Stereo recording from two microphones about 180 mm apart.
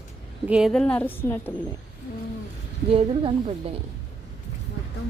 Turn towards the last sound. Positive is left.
turn(degrees=-30)  # may be behind; listen again after turning